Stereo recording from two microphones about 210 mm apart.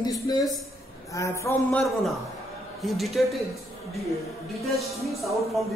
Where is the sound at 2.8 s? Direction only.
Centre (ahead or behind).